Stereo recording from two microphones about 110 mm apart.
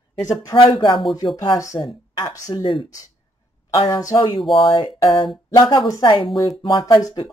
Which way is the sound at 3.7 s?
35° left (ahead or behind).